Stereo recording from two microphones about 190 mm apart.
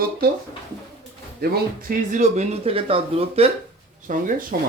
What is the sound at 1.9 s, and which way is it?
Speech, 40° right (ahead or behind).